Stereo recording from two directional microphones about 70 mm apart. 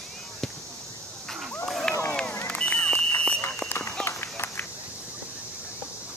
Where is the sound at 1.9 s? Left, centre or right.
Left.